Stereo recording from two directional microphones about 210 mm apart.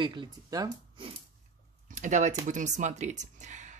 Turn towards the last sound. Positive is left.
turn(degrees=-35)  # may be behind; listen again after turning